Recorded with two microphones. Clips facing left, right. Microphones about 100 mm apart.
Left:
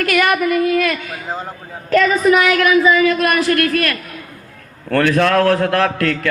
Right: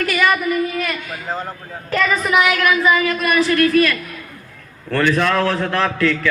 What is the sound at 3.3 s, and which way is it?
A man's voice, 55° left (ahead or behind).